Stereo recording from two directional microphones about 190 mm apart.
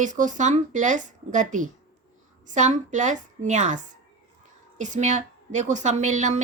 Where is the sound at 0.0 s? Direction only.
40° right (ahead or behind).